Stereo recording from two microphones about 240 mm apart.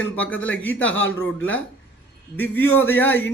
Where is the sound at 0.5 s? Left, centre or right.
Centre.